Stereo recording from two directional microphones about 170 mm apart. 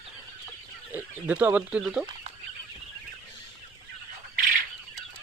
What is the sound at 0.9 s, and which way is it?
Speech, 10° right (ahead or behind).